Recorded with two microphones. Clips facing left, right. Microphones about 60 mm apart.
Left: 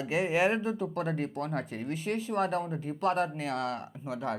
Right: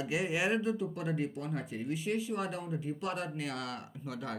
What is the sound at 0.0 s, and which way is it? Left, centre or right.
Speech, left.